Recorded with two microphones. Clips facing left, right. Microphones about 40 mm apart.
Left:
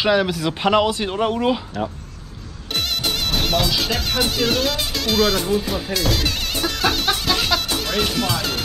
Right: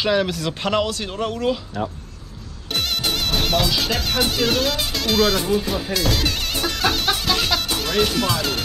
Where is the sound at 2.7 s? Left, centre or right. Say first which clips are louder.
Even; centre.